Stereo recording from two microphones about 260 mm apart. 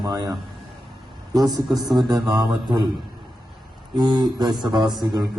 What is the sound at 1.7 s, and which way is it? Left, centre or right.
Speech, centre.